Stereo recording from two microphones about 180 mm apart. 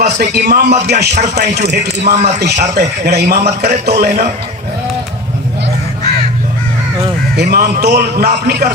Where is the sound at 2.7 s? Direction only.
65° right (ahead or behind).